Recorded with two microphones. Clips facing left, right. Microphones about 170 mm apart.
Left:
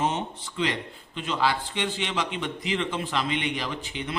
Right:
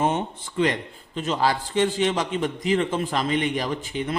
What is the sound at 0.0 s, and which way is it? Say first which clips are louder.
Speech: right 4 dB; 50° right (ahead or behind).